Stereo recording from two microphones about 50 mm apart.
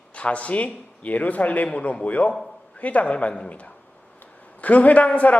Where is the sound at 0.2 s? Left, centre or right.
Left.